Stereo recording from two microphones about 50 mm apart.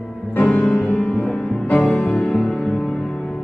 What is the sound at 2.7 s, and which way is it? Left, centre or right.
Music, centre.